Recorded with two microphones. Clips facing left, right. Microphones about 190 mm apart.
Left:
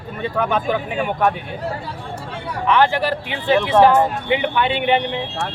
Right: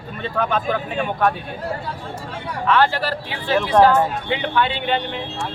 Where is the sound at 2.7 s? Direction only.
15° left (ahead or behind).